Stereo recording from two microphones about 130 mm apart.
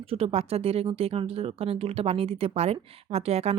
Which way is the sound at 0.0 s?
50° right (ahead or behind).